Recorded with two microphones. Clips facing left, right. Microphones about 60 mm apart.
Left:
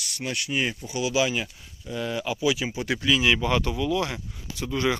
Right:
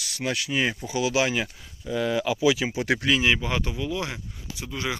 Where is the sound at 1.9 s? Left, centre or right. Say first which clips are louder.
Right 4 dB; right.